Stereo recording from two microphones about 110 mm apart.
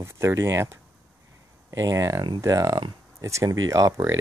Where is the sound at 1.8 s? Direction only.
30° right (ahead or behind).